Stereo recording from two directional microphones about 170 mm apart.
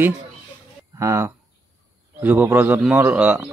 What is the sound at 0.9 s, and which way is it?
Speech, 15° right (ahead or behind).